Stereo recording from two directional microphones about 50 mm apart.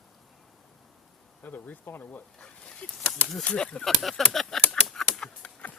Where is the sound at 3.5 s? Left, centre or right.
Left.